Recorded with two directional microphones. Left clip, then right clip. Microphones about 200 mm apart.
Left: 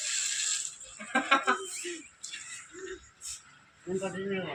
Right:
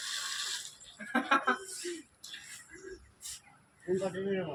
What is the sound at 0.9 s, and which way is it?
Chicken, 20° right (ahead or behind).